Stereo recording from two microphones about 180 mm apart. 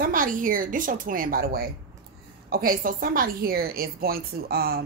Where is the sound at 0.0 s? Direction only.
50° right (ahead or behind).